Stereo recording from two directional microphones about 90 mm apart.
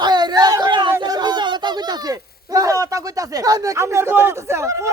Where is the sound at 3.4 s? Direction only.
40° right (ahead or behind).